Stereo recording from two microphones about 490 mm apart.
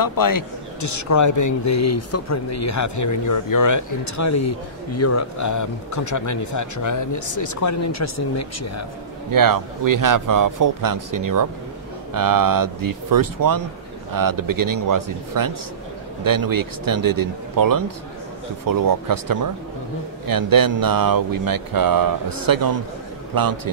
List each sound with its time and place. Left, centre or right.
0.0 s speech: left
9.3 s speech: right